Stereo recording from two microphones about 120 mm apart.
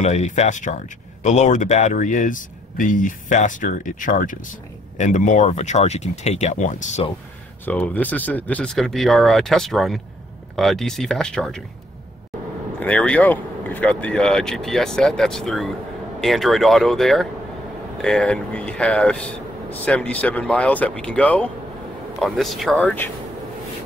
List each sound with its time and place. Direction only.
0.0 s speech: 70° left (ahead or behind)
7.6 s speech: 15° left (ahead or behind)
8.7 s speech: centre (ahead or behind)
12.8 s speech: 10° left (ahead or behind)
22.8 s speech: 15° left (ahead or behind)